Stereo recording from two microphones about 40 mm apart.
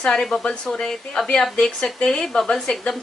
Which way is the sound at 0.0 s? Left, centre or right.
Centre.